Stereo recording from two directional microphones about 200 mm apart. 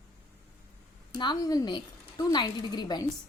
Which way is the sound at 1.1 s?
20° left (ahead or behind).